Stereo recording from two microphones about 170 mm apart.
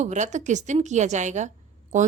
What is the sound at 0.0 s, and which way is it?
A woman's voice, 45° right (ahead or behind).